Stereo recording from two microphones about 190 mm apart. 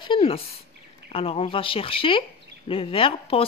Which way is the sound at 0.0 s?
30° left (ahead or behind).